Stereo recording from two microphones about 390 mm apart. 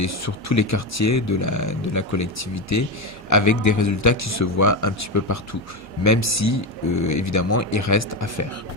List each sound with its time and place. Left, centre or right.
0.0 s speech: left